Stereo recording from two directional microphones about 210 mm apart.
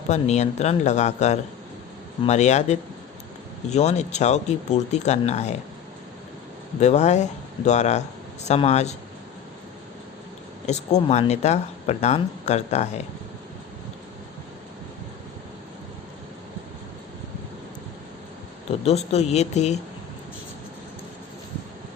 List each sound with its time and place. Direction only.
0.1 s speech: 30° left (ahead or behind)
6.7 s speech: 35° left (ahead or behind)
10.7 s speech: 30° left (ahead or behind)
18.9 s speech: 30° left (ahead or behind)